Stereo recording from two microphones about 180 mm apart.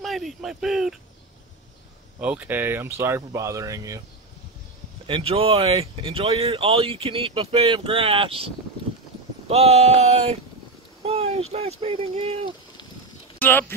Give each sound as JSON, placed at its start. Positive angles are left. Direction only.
{"t": 0.0, "sound": "a sound", "side_deg": 0}
{"t": 2.1, "sound": "speech", "side_deg": -5}
{"t": 5.0, "sound": "speech", "side_deg": -30}
{"t": 13.4, "sound": "speech", "side_deg": 10}